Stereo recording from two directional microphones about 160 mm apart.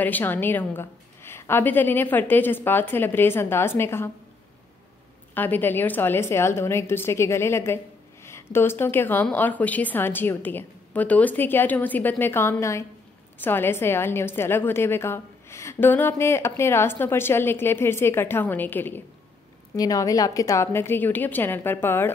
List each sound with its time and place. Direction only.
0.0 s a woman's voice: 10° left (ahead or behind)
5.3 s a woman's voice: 10° left (ahead or behind)